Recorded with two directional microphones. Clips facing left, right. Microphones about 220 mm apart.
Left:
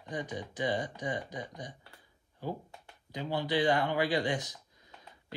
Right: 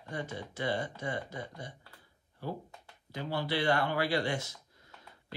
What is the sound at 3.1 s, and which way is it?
Speech, 15° left (ahead or behind).